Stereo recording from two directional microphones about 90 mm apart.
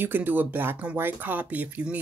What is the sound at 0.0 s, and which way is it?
Speech, 20° right (ahead or behind).